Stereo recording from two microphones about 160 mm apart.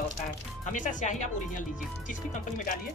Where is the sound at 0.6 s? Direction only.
50° left (ahead or behind).